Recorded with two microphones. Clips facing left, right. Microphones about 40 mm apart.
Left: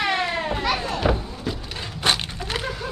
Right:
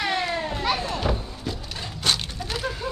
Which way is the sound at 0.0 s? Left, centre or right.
Left.